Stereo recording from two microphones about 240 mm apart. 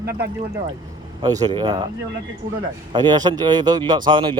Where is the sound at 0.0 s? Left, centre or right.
Right.